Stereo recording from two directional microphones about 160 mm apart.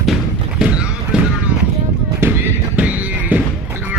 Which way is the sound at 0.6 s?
5° right (ahead or behind).